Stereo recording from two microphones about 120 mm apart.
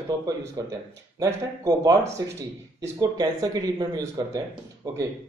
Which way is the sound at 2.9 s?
35° right (ahead or behind).